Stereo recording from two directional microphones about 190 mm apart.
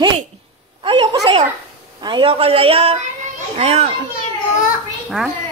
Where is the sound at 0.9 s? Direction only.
25° right (ahead or behind).